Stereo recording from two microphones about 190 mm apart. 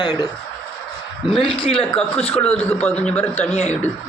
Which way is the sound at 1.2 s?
25° left (ahead or behind).